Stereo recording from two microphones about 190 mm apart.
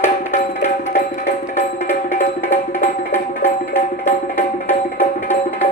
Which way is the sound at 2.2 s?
40° left (ahead or behind).